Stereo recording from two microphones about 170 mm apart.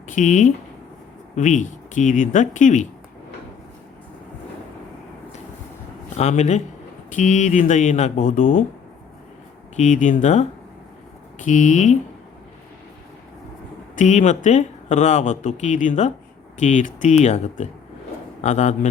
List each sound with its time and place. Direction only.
0.1 s speech: 45° left (ahead or behind)
6.1 s speech: 40° left (ahead or behind)
9.7 s speech: 45° left (ahead or behind)
11.4 s speech: 45° left (ahead or behind)
13.9 s speech: 45° left (ahead or behind)